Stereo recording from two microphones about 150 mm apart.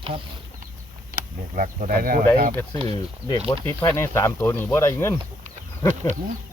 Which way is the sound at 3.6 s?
20° left (ahead or behind).